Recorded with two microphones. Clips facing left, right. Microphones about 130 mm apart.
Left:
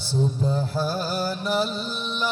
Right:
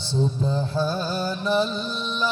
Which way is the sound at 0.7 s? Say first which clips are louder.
Right 1 dB; 5° left (ahead or behind).